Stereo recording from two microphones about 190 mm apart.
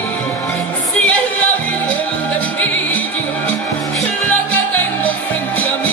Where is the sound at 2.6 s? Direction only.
10° left (ahead or behind).